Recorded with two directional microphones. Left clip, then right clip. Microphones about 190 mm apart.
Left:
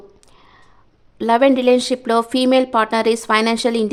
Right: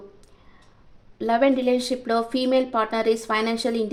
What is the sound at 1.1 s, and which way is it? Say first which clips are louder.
A woman's voice: left 6 dB; 35° left (ahead or behind).